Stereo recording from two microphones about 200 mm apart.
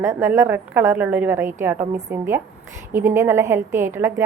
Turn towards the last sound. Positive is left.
turn(degrees=-15)  # may be behind; listen again after turning